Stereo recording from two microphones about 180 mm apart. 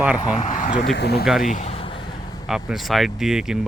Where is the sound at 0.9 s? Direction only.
65° left (ahead or behind).